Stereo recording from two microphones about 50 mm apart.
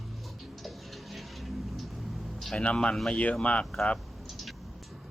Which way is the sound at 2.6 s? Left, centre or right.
Left.